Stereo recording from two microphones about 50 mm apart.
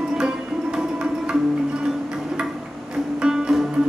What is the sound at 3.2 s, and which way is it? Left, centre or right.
Music, centre.